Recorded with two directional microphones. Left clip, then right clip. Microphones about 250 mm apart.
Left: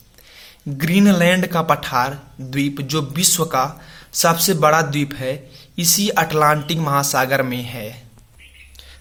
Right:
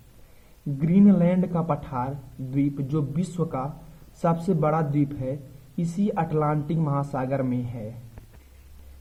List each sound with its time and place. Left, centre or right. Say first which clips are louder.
0.8 s speech: left 6 dB; centre
3.3 s speech: left 8 dB; left